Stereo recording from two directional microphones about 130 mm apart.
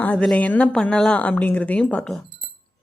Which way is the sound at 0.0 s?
10° left (ahead or behind).